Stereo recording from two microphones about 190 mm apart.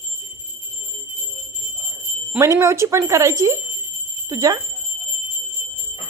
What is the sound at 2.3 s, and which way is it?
Speech, 15° right (ahead or behind).